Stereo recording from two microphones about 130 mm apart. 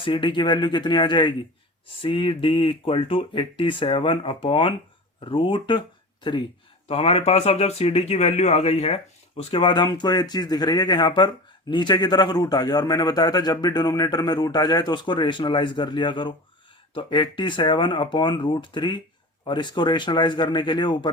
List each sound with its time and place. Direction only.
0.0 s a man's voice: 40° left (ahead or behind)
6.8 s a man's voice: 50° left (ahead or behind)